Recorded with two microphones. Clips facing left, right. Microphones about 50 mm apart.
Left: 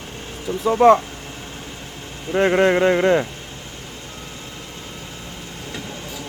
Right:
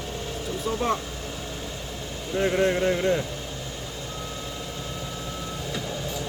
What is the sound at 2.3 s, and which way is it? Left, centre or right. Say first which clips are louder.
Speech: left 7 dB; left.